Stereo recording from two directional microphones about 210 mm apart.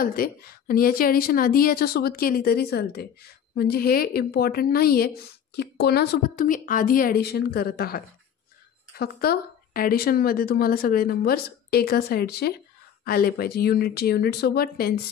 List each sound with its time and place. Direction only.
0.0 s speech: 45° left (ahead or behind)